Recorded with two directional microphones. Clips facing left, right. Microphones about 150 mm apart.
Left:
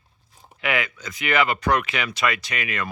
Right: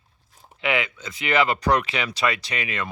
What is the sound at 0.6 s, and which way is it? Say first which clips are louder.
Speech: right 1 dB; 25° right (ahead or behind).